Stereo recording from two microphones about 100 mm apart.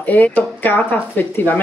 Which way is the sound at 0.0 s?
15° left (ahead or behind).